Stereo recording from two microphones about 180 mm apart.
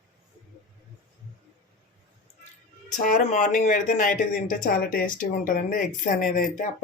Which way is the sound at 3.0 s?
45° left (ahead or behind).